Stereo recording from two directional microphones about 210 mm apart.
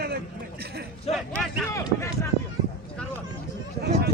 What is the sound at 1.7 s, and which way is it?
Speech, 15° left (ahead or behind).